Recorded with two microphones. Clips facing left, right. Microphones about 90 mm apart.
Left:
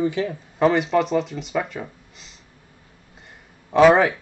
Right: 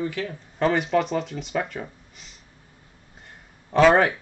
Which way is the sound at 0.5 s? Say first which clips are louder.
Left 3 dB; 5° left (ahead or behind).